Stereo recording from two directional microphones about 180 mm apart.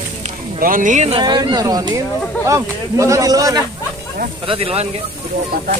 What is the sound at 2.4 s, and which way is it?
Speech, 15° right (ahead or behind).